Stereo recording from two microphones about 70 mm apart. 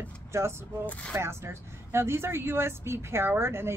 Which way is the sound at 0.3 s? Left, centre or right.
Right.